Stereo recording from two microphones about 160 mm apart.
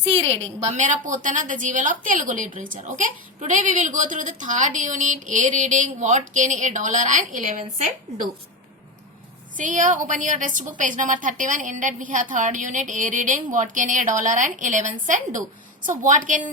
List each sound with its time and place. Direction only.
0.2 s a woman's voice: 45° right (ahead or behind)
9.6 s a woman's voice: 55° right (ahead or behind)